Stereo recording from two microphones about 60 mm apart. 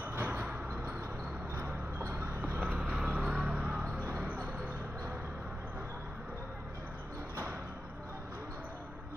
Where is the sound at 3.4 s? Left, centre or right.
Right.